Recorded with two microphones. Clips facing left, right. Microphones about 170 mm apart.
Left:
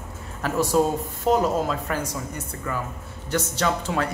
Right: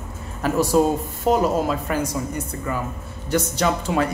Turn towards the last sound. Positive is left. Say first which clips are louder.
# right 3 dB
turn(degrees=-15)  # may be behind; listen again after turning